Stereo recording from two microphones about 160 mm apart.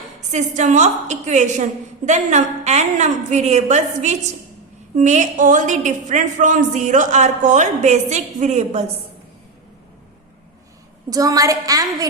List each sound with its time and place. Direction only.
0.3 s a woman's voice: 45° right (ahead or behind)
11.1 s a woman's voice: 20° right (ahead or behind)